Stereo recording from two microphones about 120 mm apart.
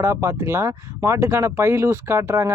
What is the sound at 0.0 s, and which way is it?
Speech, 20° right (ahead or behind).